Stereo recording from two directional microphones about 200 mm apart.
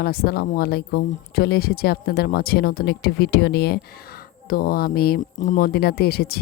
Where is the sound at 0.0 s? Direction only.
50° left (ahead or behind).